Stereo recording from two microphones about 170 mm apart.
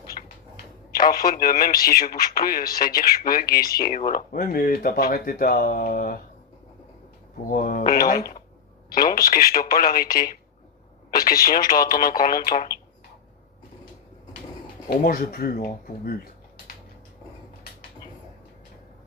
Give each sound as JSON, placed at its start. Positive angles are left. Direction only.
{"t": 0.2, "sound": "a sound", "side_deg": 45}
{"t": 0.9, "sound": "speech", "side_deg": 60}
{"t": 7.5, "sound": "speech", "side_deg": 55}
{"t": 14.8, "sound": "speech", "side_deg": 60}